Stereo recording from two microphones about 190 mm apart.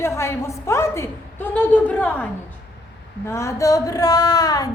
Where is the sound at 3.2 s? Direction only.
15° left (ahead or behind).